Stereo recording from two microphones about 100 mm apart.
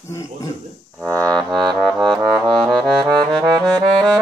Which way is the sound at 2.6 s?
Centre (ahead or behind).